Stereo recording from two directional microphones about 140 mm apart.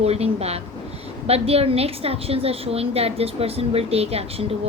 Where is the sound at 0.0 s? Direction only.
50° right (ahead or behind).